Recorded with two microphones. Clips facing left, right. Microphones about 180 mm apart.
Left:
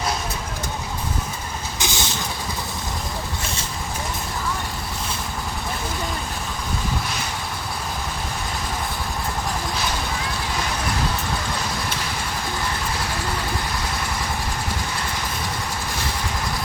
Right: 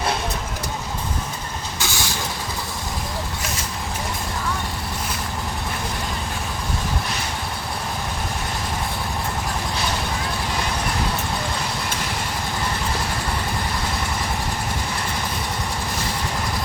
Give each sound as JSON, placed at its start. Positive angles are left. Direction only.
{"t": 1.8, "sound": "vehicle", "side_deg": 20}